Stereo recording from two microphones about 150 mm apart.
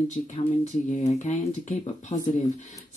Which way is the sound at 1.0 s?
55° left (ahead or behind).